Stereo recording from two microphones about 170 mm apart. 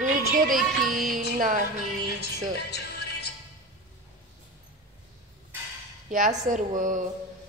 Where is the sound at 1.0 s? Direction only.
50° right (ahead or behind).